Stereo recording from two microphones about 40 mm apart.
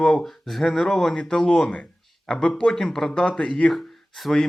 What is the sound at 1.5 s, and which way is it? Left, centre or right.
A man's voice, left.